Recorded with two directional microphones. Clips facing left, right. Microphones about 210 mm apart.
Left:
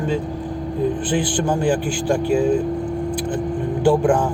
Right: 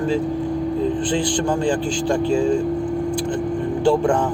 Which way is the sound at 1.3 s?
5° left (ahead or behind).